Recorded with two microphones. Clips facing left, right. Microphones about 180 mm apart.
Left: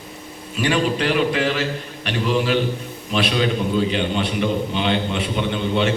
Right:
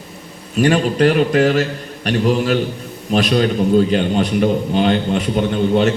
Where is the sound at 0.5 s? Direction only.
45° right (ahead or behind).